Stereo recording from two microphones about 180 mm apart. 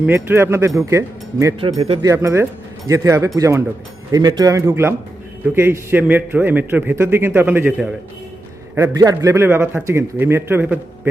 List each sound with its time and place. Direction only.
0.0 s a man's voice: 10° right (ahead or behind)
1.5 s speech: 30° right (ahead or behind)
2.0 s a man's voice: 15° right (ahead or behind)